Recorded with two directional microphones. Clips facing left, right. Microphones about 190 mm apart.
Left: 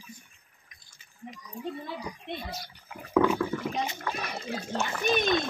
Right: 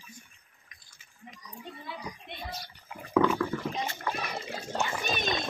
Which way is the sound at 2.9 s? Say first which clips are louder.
Left 1 dB; centre (ahead or behind).